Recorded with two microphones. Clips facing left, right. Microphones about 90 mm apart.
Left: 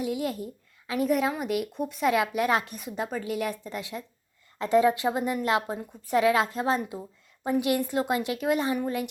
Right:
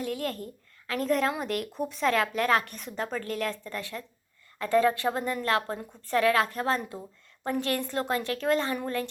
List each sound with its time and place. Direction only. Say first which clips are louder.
0.0 s a woman's voice: left 3 dB; 15° left (ahead or behind)